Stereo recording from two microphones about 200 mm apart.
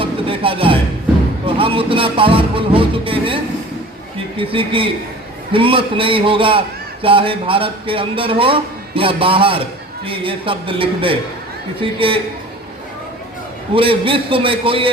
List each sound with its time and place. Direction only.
0.0 s music: 25° right (ahead or behind)
1.5 s a man's voice: 25° right (ahead or behind)
13.7 s a man's voice: 25° right (ahead or behind)